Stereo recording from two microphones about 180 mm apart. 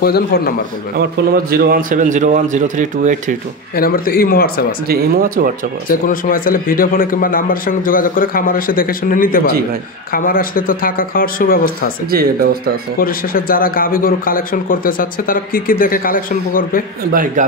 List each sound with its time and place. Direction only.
0.0 s speech: 60° left (ahead or behind)
0.9 s a man's voice: 60° right (ahead or behind); by 3.3 s 45° right (ahead or behind)
3.7 s speech: 55° left (ahead or behind)
4.8 s a man's voice: 55° right (ahead or behind)
5.9 s a man's voice: 50° left (ahead or behind)
12.1 s speech: 55° right (ahead or behind)
13.0 s a man's voice: 55° left (ahead or behind)
17.1 s a man's voice: 50° right (ahead or behind)